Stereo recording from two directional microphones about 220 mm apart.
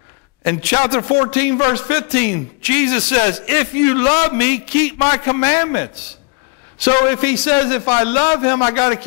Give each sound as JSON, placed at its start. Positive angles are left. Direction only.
{"t": 0.4, "sound": "a man's voice", "side_deg": 15}
{"t": 1.3, "sound": "a man's voice", "side_deg": 15}